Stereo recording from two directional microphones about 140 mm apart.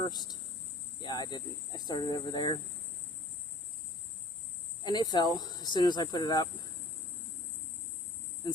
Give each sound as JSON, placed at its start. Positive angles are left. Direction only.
{"t": 0.0, "sound": "speech", "side_deg": 30}
{"t": 4.8, "sound": "speech", "side_deg": 30}